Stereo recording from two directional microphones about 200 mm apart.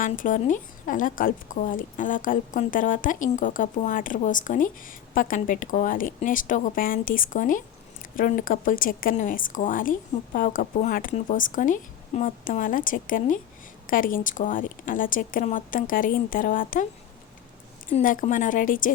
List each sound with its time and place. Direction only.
0.0 s a woman's voice: 40° left (ahead or behind)
17.9 s a woman's voice: 40° left (ahead or behind)